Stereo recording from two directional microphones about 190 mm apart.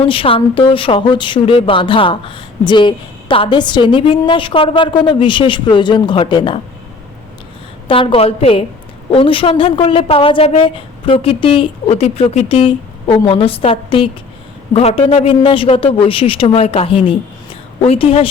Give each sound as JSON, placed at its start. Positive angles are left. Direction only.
{"t": 0.0, "sound": "speech", "side_deg": 30}
{"t": 7.9, "sound": "speech", "side_deg": 30}